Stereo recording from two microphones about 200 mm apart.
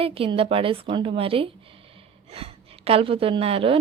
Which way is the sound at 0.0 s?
30° right (ahead or behind).